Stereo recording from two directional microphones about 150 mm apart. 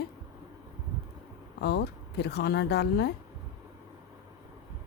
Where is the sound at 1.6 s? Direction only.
90° left.